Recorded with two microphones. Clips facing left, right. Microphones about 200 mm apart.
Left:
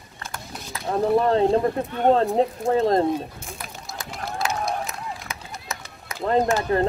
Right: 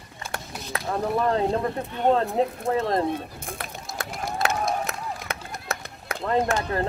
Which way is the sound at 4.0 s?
65° right (ahead or behind).